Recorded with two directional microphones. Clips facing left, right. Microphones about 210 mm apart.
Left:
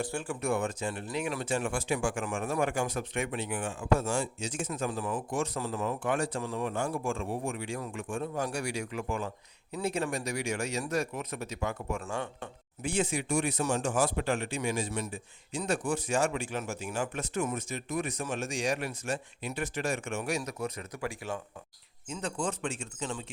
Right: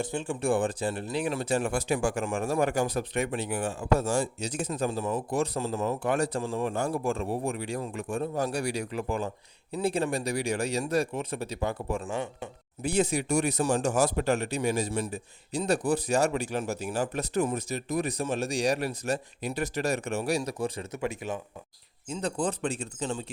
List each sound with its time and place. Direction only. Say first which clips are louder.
0.0 s speech: right 3 dB; 20° right (ahead or behind)
12.0 s speech: right 3 dB; 15° right (ahead or behind)
12.8 s speech: right 4 dB; 40° right (ahead or behind); by 21.4 s 20° right (ahead or behind)
22.1 s speech: right 4 dB; 35° right (ahead or behind)